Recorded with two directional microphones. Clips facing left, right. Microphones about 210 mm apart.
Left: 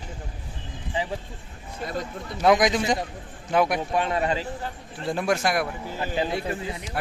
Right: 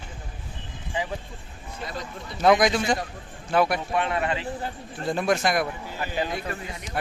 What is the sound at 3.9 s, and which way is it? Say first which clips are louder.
Speech: left 2 dB; 35° left (ahead or behind).